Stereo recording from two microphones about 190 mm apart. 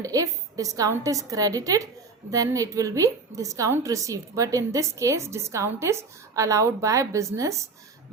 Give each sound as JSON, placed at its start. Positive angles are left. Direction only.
{"t": 0.0, "sound": "a woman's voice", "side_deg": -20}